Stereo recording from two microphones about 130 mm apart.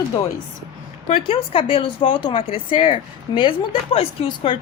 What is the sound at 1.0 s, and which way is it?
A woman's voice, 45° left (ahead or behind).